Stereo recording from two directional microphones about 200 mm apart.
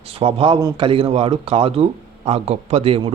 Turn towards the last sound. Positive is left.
turn(degrees=-30)  # may be behind; listen again after turning